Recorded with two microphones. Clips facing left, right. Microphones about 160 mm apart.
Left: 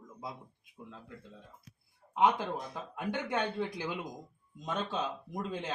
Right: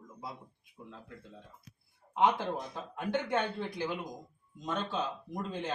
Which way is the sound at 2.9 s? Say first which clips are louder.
Right 2 dB; 15° left (ahead or behind).